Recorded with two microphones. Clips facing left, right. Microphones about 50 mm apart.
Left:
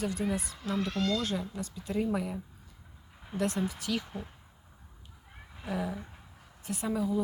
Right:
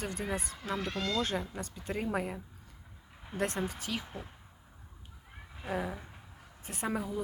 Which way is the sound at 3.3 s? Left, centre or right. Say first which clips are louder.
Left 2 dB; right.